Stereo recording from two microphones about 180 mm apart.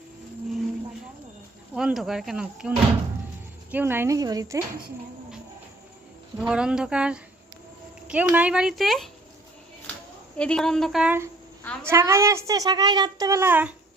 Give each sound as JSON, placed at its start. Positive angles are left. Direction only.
{"t": 1.7, "sound": "speech", "side_deg": 0}
{"t": 6.4, "sound": "speech", "side_deg": -5}
{"t": 10.3, "sound": "speech", "side_deg": 5}
{"t": 11.6, "sound": "a woman's voice", "side_deg": 5}
{"t": 11.9, "sound": "speech", "side_deg": -15}